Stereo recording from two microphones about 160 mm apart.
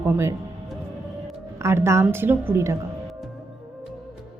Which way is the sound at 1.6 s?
15° right (ahead or behind).